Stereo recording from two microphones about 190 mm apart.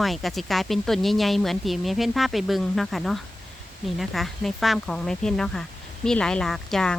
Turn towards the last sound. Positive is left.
turn(degrees=5)  # may be behind; listen again after turning